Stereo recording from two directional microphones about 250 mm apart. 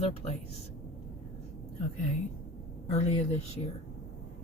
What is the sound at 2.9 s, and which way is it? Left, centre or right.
Speech, left.